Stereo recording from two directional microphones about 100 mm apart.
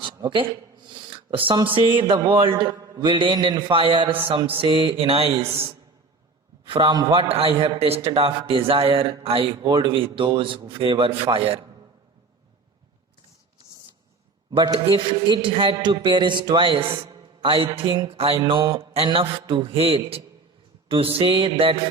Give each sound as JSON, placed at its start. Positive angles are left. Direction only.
{"t": 0.3, "sound": "a sound", "side_deg": -55}
{"t": 1.3, "sound": "a man's voice", "side_deg": -65}
{"t": 6.7, "sound": "a man's voice", "side_deg": -50}
{"t": 7.1, "sound": "a man's voice", "side_deg": -65}
{"t": 9.7, "sound": "a man's voice", "side_deg": -60}
{"t": 14.5, "sound": "a man's voice", "side_deg": -55}
{"t": 17.1, "sound": "a sound", "side_deg": -45}
{"t": 17.5, "sound": "a man's voice", "side_deg": -65}
{"t": 18.4, "sound": "a man's voice", "side_deg": -55}